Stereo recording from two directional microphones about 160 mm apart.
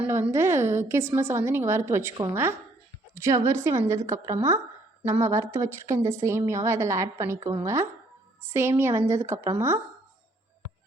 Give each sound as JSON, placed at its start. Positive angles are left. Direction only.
{"t": 0.1, "sound": "a woman's voice", "side_deg": -15}